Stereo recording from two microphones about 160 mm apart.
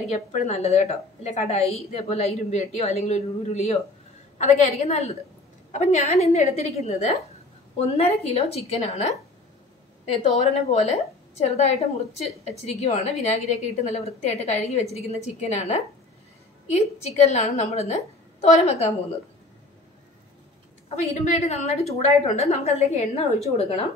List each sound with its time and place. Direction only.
0.1 s a woman's voice: 45° left (ahead or behind)
10.3 s a woman's voice: 45° left (ahead or behind)
20.9 s a woman's voice: 45° left (ahead or behind)